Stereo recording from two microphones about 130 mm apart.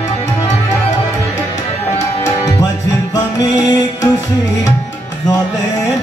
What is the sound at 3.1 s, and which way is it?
Music, 30° left (ahead or behind).